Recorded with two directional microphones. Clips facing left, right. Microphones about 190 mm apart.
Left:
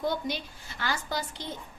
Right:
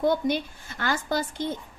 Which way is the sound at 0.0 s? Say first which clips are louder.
Right 7 dB; 50° right (ahead or behind).